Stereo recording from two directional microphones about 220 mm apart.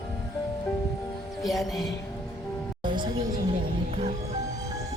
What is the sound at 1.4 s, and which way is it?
Music, centre (ahead or behind).